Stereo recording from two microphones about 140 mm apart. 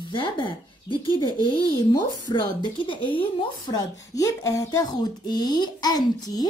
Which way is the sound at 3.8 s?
25° left (ahead or behind).